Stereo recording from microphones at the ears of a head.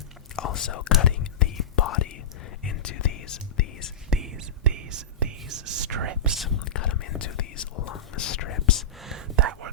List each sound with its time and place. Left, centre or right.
0.3 s speech: left
2.6 s whispering: left
4.1 s whispering: right
6.5 s whispering: left
9.1 s whispering: right